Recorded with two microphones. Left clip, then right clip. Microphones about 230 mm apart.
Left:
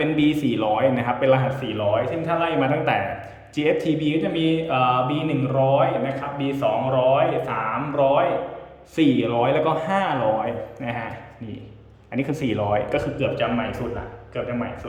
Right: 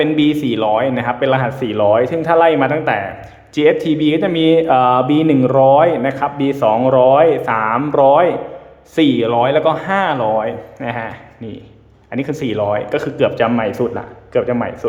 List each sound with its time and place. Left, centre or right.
0.0 s speech: centre
1.6 s a man's voice: right
9.0 s speech: centre
12.1 s a man's voice: centre; by 14.6 s right